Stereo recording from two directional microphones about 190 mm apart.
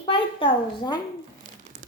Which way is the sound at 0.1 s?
25° left (ahead or behind).